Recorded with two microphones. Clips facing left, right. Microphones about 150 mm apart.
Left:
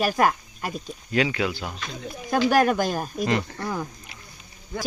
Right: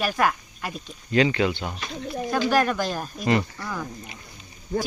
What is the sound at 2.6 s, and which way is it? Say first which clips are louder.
Speech: left 3 dB; 45° left (ahead or behind).